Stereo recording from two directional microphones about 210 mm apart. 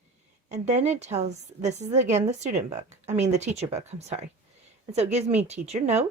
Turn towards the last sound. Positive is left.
turn(degrees=-30)  # may be behind; listen again after turning